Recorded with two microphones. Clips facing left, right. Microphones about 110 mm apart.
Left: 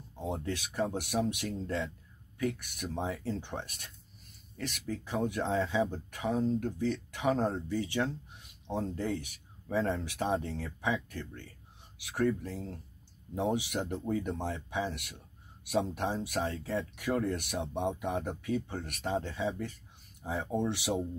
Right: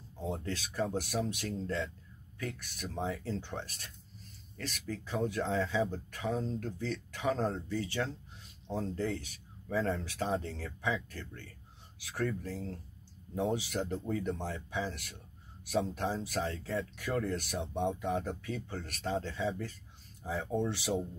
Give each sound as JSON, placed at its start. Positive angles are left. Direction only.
{"t": 0.2, "sound": "speech", "side_deg": 20}